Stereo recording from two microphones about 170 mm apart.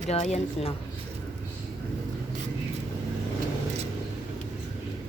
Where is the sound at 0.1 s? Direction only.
40° left (ahead or behind).